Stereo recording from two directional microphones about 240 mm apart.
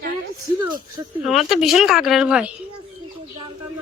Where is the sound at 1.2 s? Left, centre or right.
Centre.